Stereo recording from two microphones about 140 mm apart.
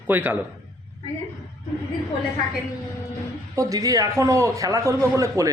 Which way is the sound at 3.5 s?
25° right (ahead or behind).